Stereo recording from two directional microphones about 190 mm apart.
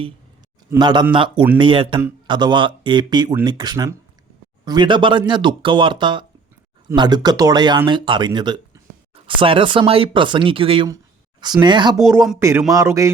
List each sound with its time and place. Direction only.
0.8 s speech: 25° right (ahead or behind)
10.8 s a sound: 20° right (ahead or behind)
11.6 s a man's voice: 25° right (ahead or behind)